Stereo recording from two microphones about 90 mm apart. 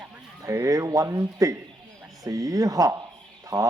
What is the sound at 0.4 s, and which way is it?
Speech, 35° right (ahead or behind).